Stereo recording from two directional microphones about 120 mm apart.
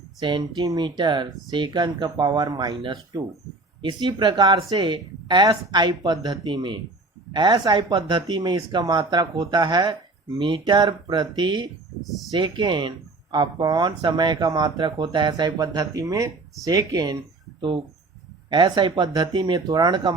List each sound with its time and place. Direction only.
0.2 s speech: 40° right (ahead or behind)
12.0 s speech: centre (ahead or behind)
12.3 s speech: 40° right (ahead or behind)
17.6 s speech: 45° right (ahead or behind)